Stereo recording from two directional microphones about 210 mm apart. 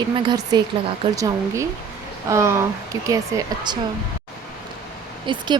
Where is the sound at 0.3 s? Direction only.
20° right (ahead or behind).